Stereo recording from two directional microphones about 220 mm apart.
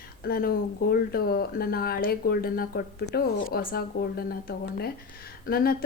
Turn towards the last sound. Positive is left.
turn(degrees=45)  # may be behind; listen again after turning